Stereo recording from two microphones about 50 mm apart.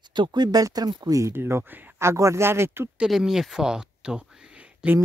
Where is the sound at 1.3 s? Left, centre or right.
Right.